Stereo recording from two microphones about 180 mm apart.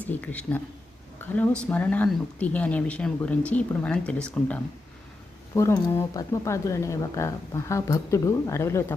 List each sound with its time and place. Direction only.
0.0 s speech: 10° left (ahead or behind)